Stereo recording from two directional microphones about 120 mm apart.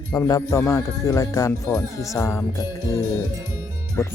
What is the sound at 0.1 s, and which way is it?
Speech, 30° left (ahead or behind).